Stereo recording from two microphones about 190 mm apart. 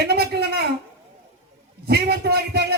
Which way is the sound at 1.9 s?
55° right (ahead or behind).